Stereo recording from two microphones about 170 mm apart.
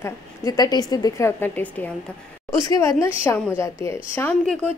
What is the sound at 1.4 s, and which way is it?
A woman's voice, 10° left (ahead or behind).